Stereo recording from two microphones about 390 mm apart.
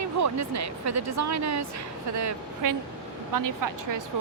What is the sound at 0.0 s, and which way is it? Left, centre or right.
Speech, right.